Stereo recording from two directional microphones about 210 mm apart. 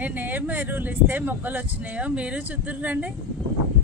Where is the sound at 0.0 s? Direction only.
10° right (ahead or behind).